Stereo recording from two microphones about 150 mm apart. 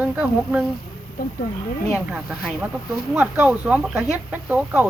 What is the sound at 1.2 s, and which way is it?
Speech, 70° left (ahead or behind).